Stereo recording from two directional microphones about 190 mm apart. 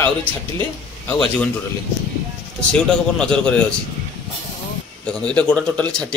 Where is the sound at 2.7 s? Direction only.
5° left (ahead or behind).